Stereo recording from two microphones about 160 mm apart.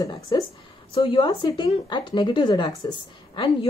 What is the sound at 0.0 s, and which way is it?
A woman's voice, 25° left (ahead or behind).